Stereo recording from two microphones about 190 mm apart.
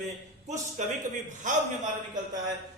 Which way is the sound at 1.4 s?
40° right (ahead or behind).